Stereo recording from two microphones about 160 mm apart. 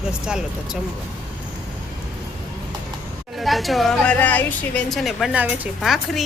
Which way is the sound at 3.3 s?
Centre (ahead or behind).